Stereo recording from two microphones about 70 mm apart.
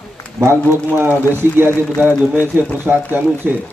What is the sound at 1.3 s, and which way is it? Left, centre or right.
Speech, right.